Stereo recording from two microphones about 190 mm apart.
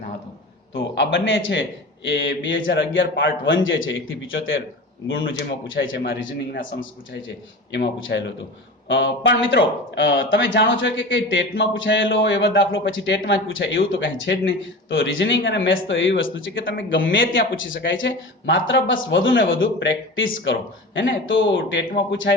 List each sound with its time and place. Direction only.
0.9 s a man's voice: 75° left (ahead or behind)
7.1 s a man's voice: 75° left (ahead or behind)